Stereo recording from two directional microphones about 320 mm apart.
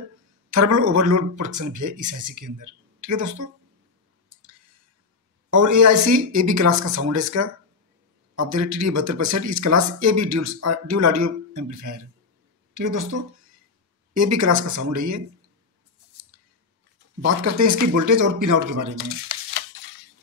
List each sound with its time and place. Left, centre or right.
0.5 s speech: right
4.3 s clicking: right
5.5 s speech: right
14.1 s speech: right
17.4 s speech: right
18.9 s a sound: right